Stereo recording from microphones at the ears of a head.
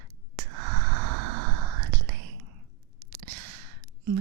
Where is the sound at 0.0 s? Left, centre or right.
Right.